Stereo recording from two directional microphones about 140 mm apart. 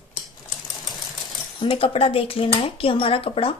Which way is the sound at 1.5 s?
40° left (ahead or behind).